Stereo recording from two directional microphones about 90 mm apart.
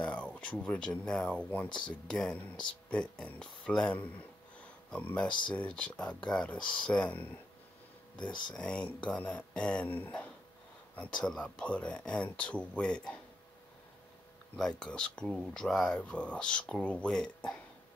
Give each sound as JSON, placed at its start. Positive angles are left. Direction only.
{"t": 0.0, "sound": "speech", "side_deg": 15}
{"t": 1.7, "sound": "speech", "side_deg": 60}
{"t": 2.0, "sound": "speech", "side_deg": 10}
{"t": 8.2, "sound": "speech", "side_deg": 60}
{"t": 8.5, "sound": "speech", "side_deg": 10}
{"t": 14.8, "sound": "speech", "side_deg": 10}